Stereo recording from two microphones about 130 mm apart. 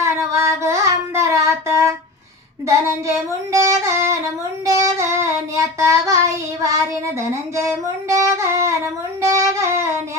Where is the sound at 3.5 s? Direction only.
25° right (ahead or behind).